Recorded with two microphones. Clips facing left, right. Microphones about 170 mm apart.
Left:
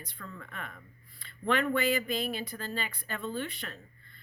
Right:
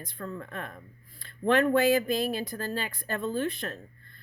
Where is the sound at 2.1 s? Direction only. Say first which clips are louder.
Right 5 dB; 45° right (ahead or behind).